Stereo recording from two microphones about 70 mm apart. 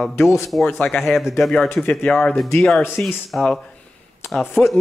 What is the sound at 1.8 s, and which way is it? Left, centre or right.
Speech, centre.